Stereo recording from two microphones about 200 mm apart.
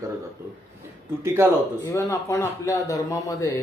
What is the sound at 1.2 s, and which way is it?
Speech, 15° right (ahead or behind).